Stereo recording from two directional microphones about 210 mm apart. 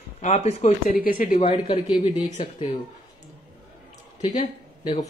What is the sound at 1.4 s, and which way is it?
Speech, 25° left (ahead or behind).